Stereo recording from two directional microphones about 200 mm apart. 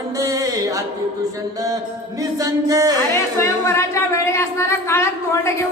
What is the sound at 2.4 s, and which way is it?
Music, 15° right (ahead or behind).